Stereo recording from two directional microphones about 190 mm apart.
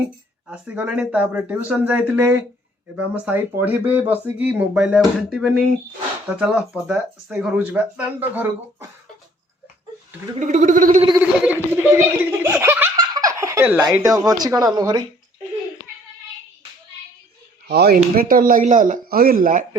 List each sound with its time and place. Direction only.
0.0 s speech: 5° right (ahead or behind)
10.4 s speech: 40° right (ahead or behind)
11.2 s speech: 10° right (ahead or behind)
13.0 s baby laughter: 20° right (ahead or behind)
14.3 s speech: 20° right (ahead or behind)
17.7 s speech: 60° right (ahead or behind)